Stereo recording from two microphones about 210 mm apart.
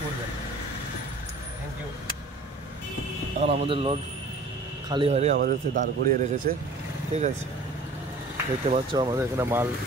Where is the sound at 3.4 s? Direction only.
30° right (ahead or behind).